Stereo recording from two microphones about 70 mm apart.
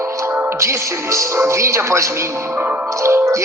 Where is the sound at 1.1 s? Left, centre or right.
Right.